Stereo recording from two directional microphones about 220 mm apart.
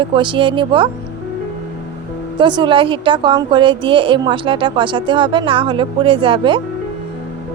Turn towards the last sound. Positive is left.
turn(degrees=-20)  # may be behind; listen again after turning